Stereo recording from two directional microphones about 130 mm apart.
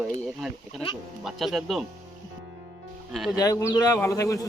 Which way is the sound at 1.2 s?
Centre (ahead or behind).